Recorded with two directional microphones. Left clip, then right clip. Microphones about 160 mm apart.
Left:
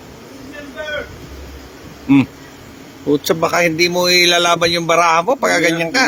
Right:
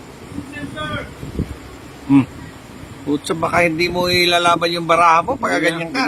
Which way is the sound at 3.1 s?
45° left (ahead or behind).